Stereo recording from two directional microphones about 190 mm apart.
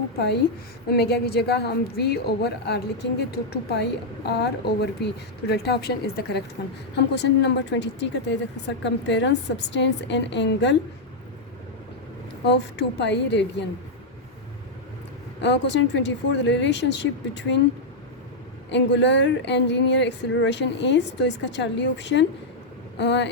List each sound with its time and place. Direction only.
0.9 s speech: 60° left (ahead or behind)
12.5 s speech: 65° left (ahead or behind)
15.4 s speech: 65° left (ahead or behind)
18.7 s speech: 70° left (ahead or behind)